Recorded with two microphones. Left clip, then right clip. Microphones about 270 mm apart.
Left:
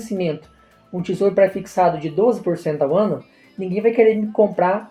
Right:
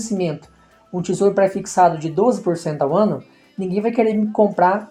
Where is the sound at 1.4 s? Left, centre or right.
Right.